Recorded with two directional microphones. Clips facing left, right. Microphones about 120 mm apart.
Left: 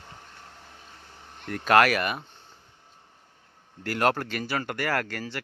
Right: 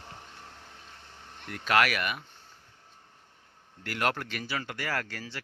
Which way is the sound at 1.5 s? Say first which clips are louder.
Left 6 dB; 45° left (ahead or behind).